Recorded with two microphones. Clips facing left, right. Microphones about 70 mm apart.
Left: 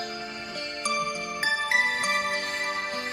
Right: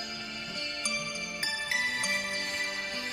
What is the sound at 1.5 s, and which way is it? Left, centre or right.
Music, left.